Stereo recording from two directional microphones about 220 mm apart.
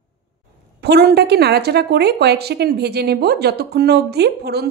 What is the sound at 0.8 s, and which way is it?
A woman's voice, 45° right (ahead or behind).